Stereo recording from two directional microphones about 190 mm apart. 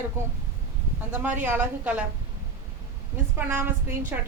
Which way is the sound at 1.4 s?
10° right (ahead or behind).